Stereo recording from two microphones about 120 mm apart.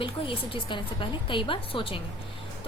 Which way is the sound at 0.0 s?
45° left (ahead or behind).